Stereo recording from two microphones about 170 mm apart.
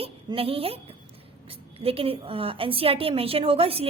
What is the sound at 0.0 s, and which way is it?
Speech, 35° right (ahead or behind).